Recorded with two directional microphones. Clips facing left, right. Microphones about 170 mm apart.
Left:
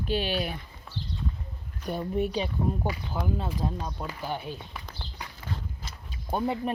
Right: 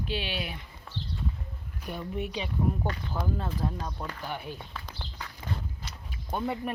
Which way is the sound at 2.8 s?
10° left (ahead or behind).